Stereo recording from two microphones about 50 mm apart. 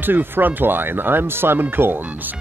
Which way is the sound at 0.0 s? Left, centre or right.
Right.